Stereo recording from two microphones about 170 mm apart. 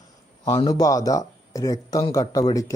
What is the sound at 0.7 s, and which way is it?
Speech, 20° left (ahead or behind).